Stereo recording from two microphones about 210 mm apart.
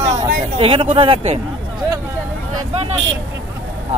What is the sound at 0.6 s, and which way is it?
Speech, 25° right (ahead or behind).